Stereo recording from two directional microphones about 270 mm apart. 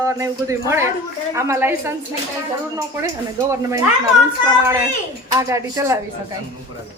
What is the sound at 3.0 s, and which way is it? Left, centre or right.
Speech, centre.